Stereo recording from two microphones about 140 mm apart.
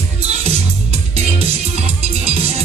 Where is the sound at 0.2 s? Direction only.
50° right (ahead or behind).